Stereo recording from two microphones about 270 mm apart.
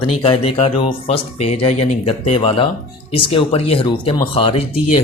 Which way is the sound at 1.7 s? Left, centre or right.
Left.